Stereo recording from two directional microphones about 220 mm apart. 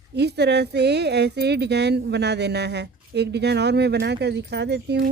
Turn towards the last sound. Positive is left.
turn(degrees=-50)  # may be behind; listen again after turning